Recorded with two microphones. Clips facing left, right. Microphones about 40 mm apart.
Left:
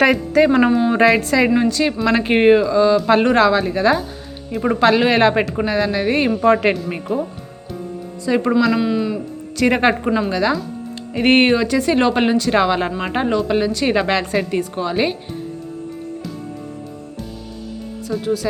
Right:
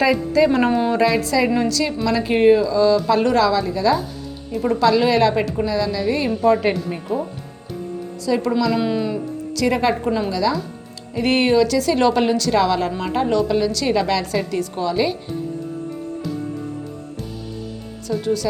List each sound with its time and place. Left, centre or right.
0.0 s a woman's voice: left
1.5 s a woman's voice: left
2.0 s a woman's voice: left
8.2 s a woman's voice: left
8.7 s speech: centre
9.6 s a woman's voice: left
11.6 s a woman's voice: left
18.1 s speech: centre